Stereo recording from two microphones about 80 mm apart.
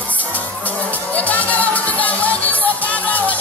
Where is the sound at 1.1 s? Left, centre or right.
Centre.